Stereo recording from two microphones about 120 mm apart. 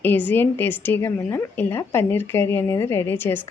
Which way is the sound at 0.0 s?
15° left (ahead or behind).